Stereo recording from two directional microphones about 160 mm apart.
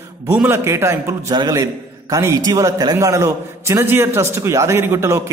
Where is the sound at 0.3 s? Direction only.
15° right (ahead or behind).